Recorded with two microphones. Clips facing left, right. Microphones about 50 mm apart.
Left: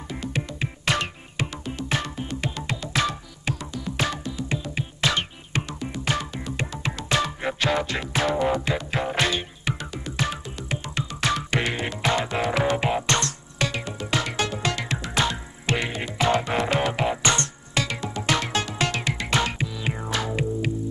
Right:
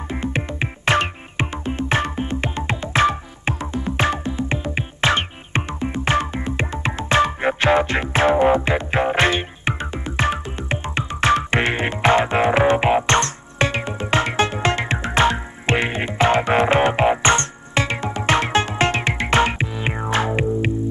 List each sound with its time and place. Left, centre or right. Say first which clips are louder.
0.1 s music: right 5 dB; right